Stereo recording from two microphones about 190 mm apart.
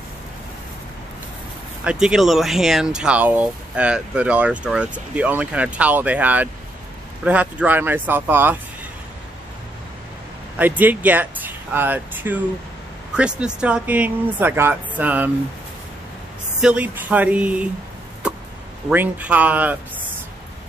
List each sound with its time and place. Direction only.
1.9 s speech: 5° right (ahead or behind)
10.6 s speech: 10° right (ahead or behind)
16.6 s speech: 5° right (ahead or behind)
18.2 s a sound: 5° right (ahead or behind)
18.9 s speech: 10° right (ahead or behind)